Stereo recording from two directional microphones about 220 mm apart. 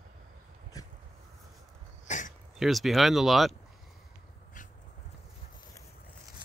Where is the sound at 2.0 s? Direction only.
35° left (ahead or behind).